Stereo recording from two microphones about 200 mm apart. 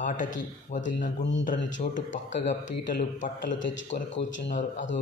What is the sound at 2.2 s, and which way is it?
Speech, 35° left (ahead or behind).